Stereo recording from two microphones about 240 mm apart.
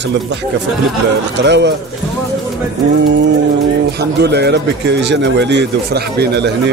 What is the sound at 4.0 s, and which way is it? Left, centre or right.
Speech, right.